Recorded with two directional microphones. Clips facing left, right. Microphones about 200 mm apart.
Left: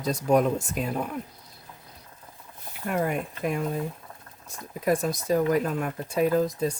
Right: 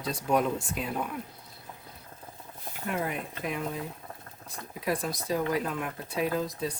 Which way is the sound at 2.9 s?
50° left (ahead or behind).